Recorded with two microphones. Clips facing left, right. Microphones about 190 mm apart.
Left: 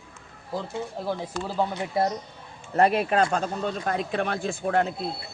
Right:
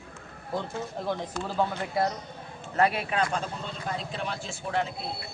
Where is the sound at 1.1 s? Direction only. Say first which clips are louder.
Even; 10° left (ahead or behind).